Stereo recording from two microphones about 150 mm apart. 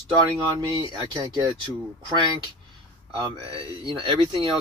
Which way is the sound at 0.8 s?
30° right (ahead or behind).